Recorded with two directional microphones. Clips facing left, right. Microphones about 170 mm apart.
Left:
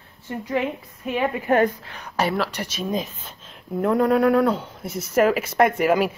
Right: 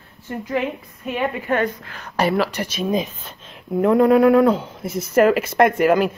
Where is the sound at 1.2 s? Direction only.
35° left (ahead or behind).